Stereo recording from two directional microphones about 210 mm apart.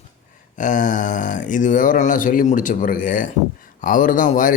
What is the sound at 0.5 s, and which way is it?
A man's voice, 35° left (ahead or behind).